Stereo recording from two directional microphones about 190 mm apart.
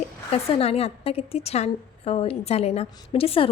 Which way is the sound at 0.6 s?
30° left (ahead or behind).